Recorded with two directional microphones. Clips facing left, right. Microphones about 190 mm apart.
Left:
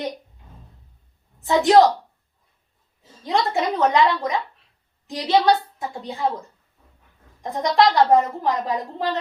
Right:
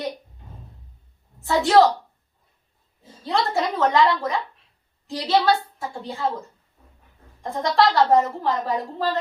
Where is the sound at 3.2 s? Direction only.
15° left (ahead or behind).